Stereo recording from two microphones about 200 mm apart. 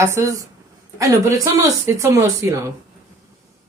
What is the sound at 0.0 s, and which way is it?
Speech, 15° right (ahead or behind).